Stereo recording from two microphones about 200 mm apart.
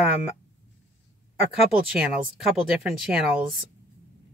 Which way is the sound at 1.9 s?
5° right (ahead or behind).